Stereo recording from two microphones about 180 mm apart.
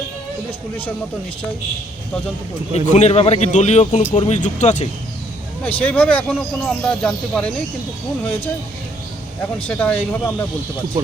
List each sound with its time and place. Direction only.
2.7 s a man's voice: 40° left (ahead or behind)
5.6 s speech: 10° left (ahead or behind)
9.6 s speech: 10° left (ahead or behind)